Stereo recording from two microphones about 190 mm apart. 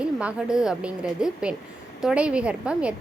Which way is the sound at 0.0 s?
5° right (ahead or behind).